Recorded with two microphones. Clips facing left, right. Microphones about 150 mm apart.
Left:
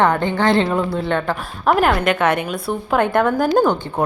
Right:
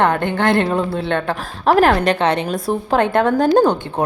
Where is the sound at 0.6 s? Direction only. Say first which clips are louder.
Right 1 dB; 35° right (ahead or behind).